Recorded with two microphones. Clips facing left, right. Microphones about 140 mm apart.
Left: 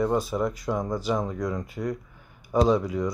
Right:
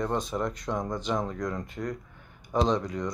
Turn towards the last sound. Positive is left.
turn(degrees=5)  # may be behind; listen again after turning